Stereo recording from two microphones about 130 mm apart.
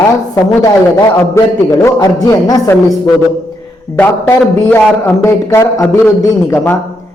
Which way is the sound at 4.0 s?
15° left (ahead or behind).